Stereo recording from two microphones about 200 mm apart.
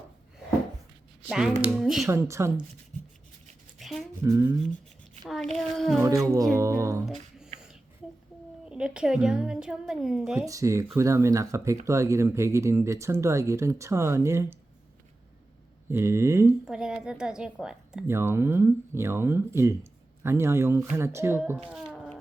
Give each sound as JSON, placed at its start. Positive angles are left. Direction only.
{"t": 1.3, "sound": "a woman's voice", "side_deg": -5}
{"t": 2.0, "sound": "a woman's voice", "side_deg": -15}
{"t": 3.8, "sound": "a sound", "side_deg": 0}
{"t": 4.2, "sound": "a woman's voice", "side_deg": -15}
{"t": 5.2, "sound": "a woman's voice", "side_deg": 0}
{"t": 6.6, "sound": "a woman's voice", "side_deg": -15}
{"t": 7.0, "sound": "a sound", "side_deg": 0}
{"t": 8.7, "sound": "a woman's voice", "side_deg": -5}
{"t": 10.4, "sound": "a woman's voice", "side_deg": -15}
{"t": 15.9, "sound": "a woman's voice", "side_deg": -15}
{"t": 21.8, "sound": "a sound", "side_deg": 0}